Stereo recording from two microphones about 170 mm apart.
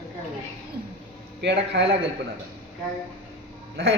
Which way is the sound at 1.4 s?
90° right.